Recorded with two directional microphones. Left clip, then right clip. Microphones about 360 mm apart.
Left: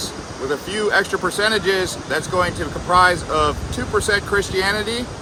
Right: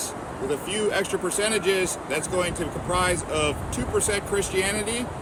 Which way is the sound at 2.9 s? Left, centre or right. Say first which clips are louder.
Left 10 dB; centre.